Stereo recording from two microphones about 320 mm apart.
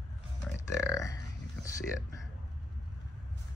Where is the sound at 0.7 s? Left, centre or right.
Centre.